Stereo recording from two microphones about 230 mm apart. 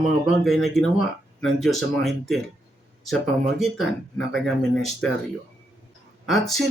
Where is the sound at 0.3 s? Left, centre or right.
Centre.